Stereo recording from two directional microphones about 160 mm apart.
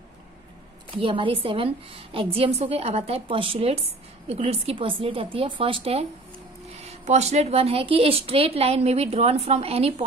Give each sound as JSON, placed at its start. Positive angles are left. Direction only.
{"t": 1.0, "sound": "speech", "side_deg": -30}